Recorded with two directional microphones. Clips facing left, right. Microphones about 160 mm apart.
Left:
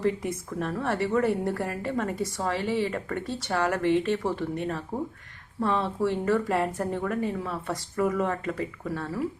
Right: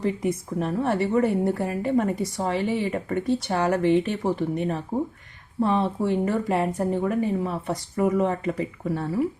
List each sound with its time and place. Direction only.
0.0 s a woman's voice: 15° right (ahead or behind)